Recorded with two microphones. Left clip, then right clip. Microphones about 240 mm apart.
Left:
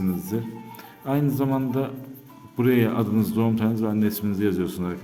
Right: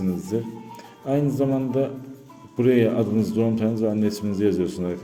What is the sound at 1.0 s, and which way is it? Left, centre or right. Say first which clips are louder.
A man's voice: right 2 dB; centre.